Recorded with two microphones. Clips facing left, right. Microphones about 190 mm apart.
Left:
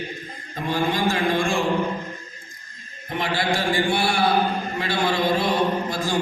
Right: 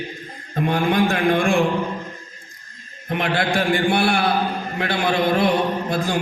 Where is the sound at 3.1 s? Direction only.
60° right (ahead or behind).